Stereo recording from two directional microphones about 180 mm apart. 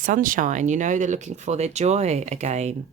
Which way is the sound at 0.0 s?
50° right (ahead or behind).